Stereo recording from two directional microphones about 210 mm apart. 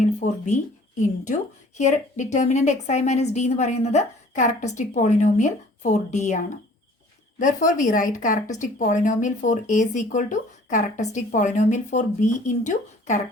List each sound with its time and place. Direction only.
0.0 s a woman's voice: 35° left (ahead or behind)